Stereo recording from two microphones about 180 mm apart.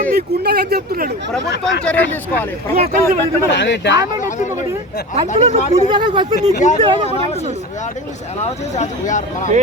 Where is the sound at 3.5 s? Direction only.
80° left.